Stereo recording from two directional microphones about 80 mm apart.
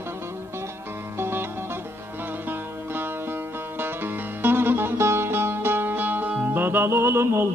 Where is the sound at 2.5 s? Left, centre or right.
Right.